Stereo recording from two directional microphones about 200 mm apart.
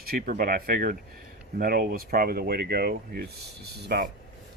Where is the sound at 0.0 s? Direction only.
45° right (ahead or behind).